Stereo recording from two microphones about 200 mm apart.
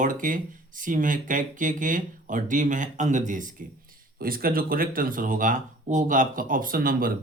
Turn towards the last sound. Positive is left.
turn(degrees=-45)  # may be behind; listen again after turning